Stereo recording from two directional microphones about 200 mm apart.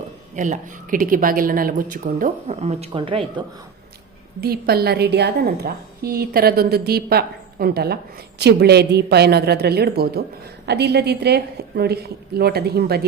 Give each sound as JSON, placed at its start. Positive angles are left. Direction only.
{"t": 0.3, "sound": "speech", "side_deg": -40}
{"t": 4.4, "sound": "a woman's voice", "side_deg": -50}